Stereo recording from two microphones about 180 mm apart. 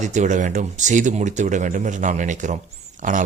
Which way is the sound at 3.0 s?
45° right (ahead or behind).